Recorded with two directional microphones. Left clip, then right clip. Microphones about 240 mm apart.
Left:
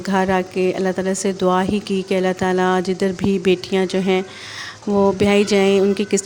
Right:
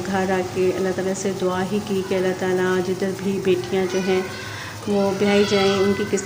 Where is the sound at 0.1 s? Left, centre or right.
Left.